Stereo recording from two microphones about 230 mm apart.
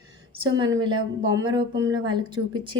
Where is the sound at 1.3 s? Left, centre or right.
Centre.